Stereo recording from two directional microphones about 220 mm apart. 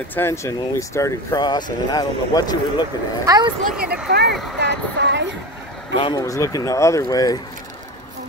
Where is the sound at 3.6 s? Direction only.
45° right (ahead or behind).